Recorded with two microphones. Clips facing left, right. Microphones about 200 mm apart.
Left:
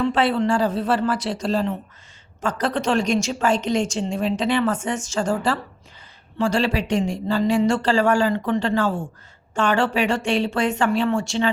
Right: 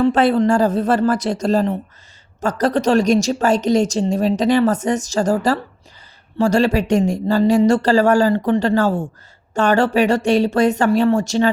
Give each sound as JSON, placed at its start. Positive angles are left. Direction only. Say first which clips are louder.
{"t": 0.0, "sound": "a woman's voice", "louder": "right 5 dB", "side_deg": -45}